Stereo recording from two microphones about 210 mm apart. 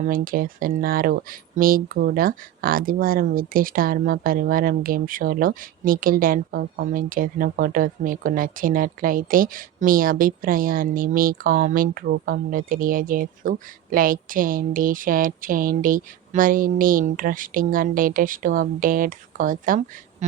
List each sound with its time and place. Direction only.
0.0 s speech: 40° right (ahead or behind)